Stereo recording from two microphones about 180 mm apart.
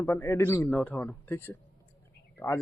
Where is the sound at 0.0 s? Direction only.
15° left (ahead or behind).